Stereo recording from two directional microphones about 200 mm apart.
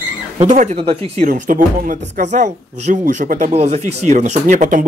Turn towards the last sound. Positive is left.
turn(degrees=-40)  # may be behind; listen again after turning